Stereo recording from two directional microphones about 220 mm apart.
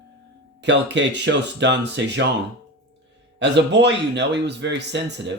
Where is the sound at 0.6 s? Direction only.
55° right (ahead or behind).